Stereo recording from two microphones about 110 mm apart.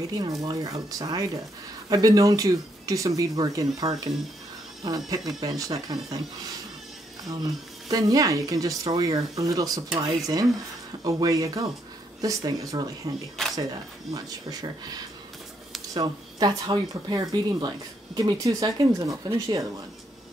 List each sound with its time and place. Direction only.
0.1 s speech: 30° right (ahead or behind)
7.2 s speech: 35° right (ahead or behind)